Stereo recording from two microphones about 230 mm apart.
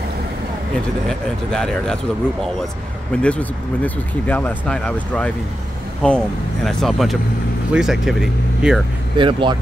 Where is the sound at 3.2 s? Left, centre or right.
Centre.